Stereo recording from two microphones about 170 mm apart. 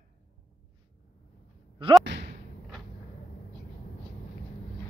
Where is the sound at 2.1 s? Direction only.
90° right.